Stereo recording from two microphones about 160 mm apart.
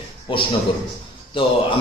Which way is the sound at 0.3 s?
30° left (ahead or behind).